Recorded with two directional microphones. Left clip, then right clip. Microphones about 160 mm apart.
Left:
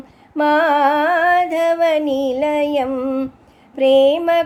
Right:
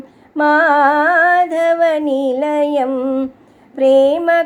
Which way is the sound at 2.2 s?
15° left (ahead or behind).